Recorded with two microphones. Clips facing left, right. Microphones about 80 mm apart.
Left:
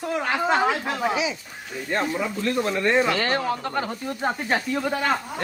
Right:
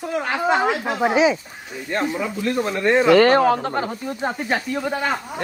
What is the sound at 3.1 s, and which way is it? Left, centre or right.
Speech, right.